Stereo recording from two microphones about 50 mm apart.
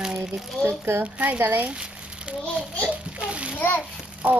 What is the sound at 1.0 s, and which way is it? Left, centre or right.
Speech, right.